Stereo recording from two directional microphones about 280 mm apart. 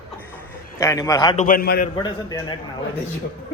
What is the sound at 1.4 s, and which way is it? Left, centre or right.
Speech, left.